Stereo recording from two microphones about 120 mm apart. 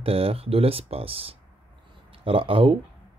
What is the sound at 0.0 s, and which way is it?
Speech, 50° right (ahead or behind).